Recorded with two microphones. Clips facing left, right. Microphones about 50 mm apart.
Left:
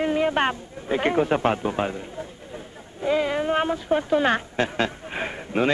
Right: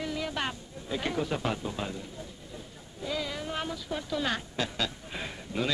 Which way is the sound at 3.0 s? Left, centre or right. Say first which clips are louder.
Left 12 dB; left.